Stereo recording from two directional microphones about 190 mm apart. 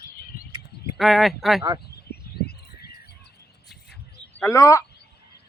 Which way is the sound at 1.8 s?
55° left (ahead or behind).